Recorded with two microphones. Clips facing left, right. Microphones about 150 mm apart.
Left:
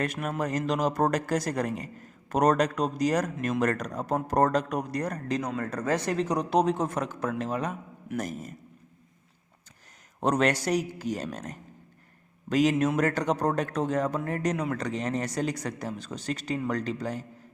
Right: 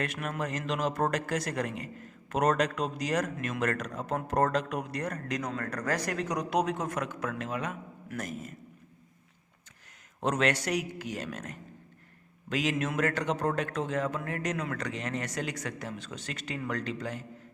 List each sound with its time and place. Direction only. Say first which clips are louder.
0.0 s speech: left 4 dB; 40° left (ahead or behind)
5.5 s speech: left 4 dB; 25° left (ahead or behind)
10.2 s speech: left 3 dB; 40° left (ahead or behind)